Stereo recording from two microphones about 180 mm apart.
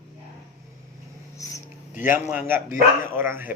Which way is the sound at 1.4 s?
20° left (ahead or behind).